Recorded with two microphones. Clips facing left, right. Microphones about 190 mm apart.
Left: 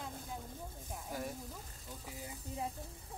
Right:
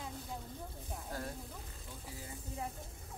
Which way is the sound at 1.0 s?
10° left (ahead or behind).